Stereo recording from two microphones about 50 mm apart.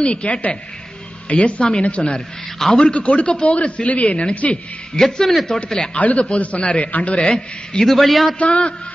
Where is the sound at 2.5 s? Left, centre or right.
Centre.